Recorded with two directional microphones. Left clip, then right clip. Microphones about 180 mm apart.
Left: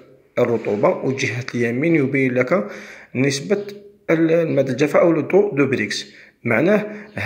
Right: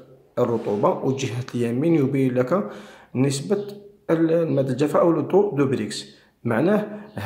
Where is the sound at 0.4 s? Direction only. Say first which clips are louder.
Left 4 dB; 5° left (ahead or behind).